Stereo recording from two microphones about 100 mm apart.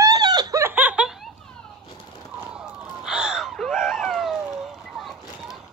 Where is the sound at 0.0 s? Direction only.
40° right (ahead or behind).